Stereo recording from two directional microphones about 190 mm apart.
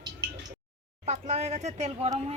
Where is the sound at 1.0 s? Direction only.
35° right (ahead or behind).